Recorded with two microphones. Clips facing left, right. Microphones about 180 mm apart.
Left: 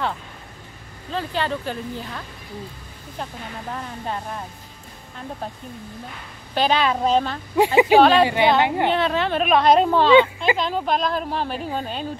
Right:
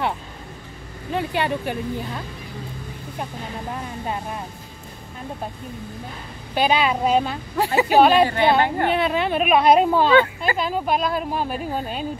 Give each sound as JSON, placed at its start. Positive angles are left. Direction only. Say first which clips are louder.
{"t": 1.1, "sound": "a woman's voice", "louder": "right 2 dB", "side_deg": -15}
{"t": 4.0, "sound": "a woman's voice", "louder": "right 1 dB", "side_deg": -10}
{"t": 6.5, "sound": "a woman's voice", "louder": "even", "side_deg": -10}
{"t": 7.5, "sound": "a woman's voice", "louder": "left 4 dB", "side_deg": 15}
{"t": 8.0, "sound": "a woman's voice", "louder": "right 4 dB", "side_deg": -10}
{"t": 8.6, "sound": "a woman's voice", "louder": "left 1 dB", "side_deg": 15}
{"t": 8.9, "sound": "a woman's voice", "louder": "even", "side_deg": -10}